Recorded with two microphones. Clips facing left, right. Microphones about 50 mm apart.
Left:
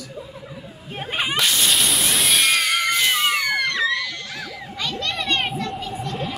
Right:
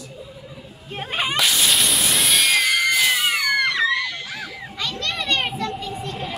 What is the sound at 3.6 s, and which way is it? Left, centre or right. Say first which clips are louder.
Screaming: right 2 dB; centre.